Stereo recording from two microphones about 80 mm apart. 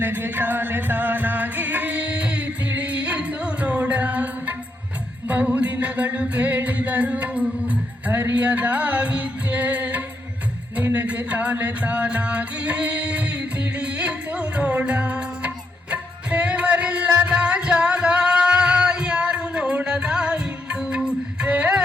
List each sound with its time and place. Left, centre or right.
0.0 s music: right